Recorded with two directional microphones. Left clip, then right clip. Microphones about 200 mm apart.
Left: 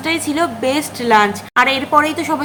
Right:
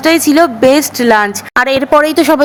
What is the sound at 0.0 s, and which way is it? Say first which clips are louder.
A woman's voice: right 9 dB; 40° right (ahead or behind).